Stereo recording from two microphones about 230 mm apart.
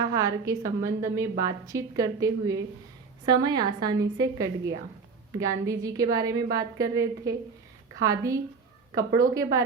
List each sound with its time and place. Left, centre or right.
0.1 s a woman's voice: centre